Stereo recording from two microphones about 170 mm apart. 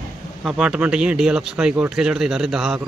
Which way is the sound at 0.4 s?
5° right (ahead or behind).